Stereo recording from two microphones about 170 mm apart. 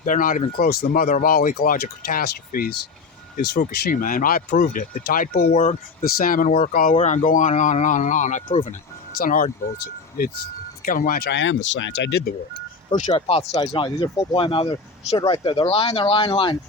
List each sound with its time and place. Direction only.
0.0 s speech: 50° left (ahead or behind)
5.5 s speech: 35° left (ahead or behind)
6.1 s speech: 55° left (ahead or behind)
6.9 s speech: 45° left (ahead or behind)
8.4 s speech: 35° left (ahead or behind)
9.1 s speech: 55° left (ahead or behind); by 12.3 s 80° left
13.0 s speech: 40° left (ahead or behind)